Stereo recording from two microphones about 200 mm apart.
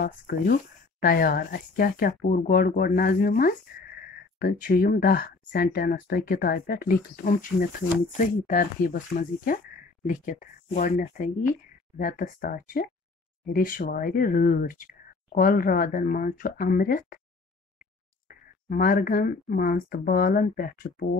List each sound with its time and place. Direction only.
0.0 s speech: 45° left (ahead or behind)
18.3 s speech: 45° left (ahead or behind)